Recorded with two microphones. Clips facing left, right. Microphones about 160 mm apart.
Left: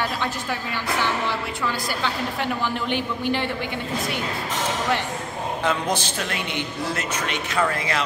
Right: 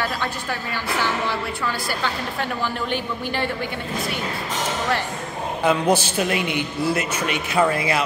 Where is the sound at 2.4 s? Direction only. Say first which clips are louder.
Right 1 dB; 20° left (ahead or behind).